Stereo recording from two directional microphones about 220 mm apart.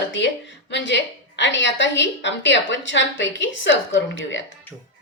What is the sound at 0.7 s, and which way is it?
A woman's voice, 55° left (ahead or behind).